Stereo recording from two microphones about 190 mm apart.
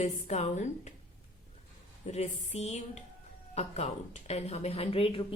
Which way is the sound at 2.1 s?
35° left (ahead or behind).